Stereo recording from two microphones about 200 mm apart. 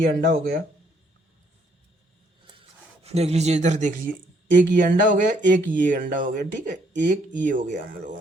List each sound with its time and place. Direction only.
0.0 s speech: 45° right (ahead or behind)
2.6 s speech: 30° right (ahead or behind)